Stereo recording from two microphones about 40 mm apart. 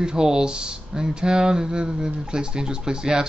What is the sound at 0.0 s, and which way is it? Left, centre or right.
Speech, centre.